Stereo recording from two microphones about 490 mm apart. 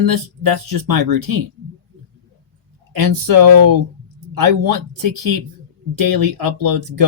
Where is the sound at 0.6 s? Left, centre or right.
Right.